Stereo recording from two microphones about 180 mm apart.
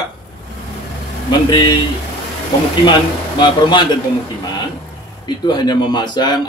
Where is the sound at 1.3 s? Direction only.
25° left (ahead or behind).